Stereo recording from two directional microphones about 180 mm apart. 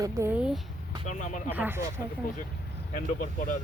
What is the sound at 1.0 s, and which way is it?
Speech, 45° left (ahead or behind).